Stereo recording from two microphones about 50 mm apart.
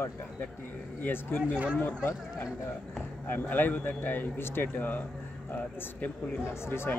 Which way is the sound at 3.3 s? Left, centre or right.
Left.